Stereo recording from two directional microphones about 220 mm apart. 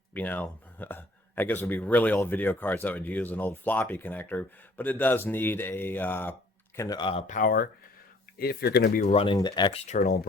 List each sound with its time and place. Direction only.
0.1 s speech: 10° left (ahead or behind); by 9.0 s 45° left (ahead or behind)
9.0 s speech: 25° left (ahead or behind)